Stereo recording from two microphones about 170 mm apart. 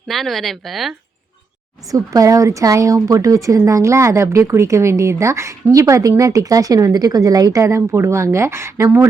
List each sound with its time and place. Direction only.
0.1 s speech: centre (ahead or behind)
1.9 s a woman's voice: 20° right (ahead or behind)